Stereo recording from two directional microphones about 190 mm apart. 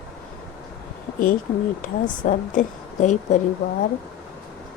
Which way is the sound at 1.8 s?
45° left (ahead or behind).